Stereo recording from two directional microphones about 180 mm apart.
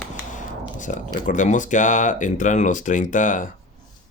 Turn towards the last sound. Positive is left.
turn(degrees=45)  # may be behind; listen again after turning